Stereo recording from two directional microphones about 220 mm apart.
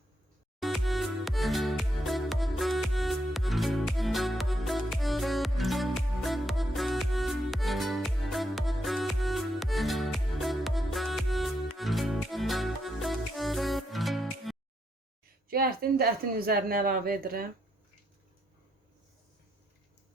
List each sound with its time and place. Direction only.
0.6 s music: centre (ahead or behind)
15.4 s speech: 45° right (ahead or behind)